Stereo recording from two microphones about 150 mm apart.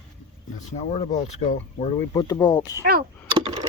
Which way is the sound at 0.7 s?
55° left (ahead or behind).